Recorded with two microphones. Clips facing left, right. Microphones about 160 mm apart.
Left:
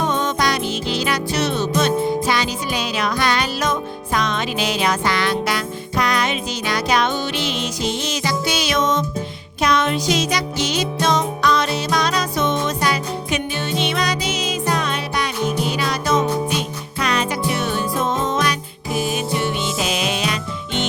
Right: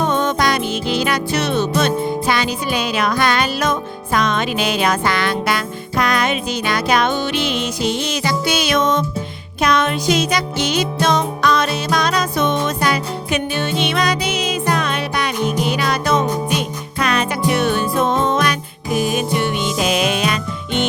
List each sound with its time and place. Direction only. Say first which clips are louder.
0.0 s music: right 3 dB; 55° right (ahead or behind)